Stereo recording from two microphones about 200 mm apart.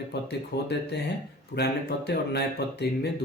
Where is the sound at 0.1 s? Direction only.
55° left (ahead or behind).